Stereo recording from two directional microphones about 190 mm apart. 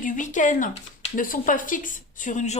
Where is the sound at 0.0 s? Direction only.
40° left (ahead or behind).